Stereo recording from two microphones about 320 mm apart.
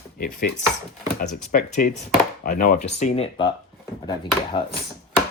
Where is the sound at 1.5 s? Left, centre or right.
Left.